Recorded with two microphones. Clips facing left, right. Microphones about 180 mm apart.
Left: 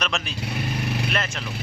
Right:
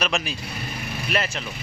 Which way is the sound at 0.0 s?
10° right (ahead or behind).